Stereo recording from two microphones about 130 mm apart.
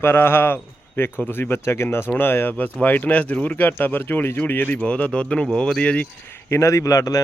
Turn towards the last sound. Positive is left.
turn(degrees=25)  # may be behind; listen again after turning